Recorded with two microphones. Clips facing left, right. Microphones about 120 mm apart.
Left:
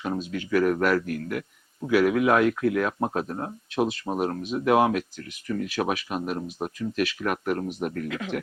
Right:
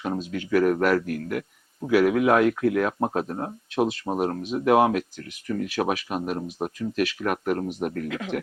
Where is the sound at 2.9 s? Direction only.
25° right (ahead or behind).